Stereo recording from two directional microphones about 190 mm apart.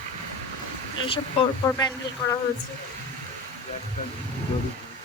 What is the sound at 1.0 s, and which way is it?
Speech, 30° left (ahead or behind).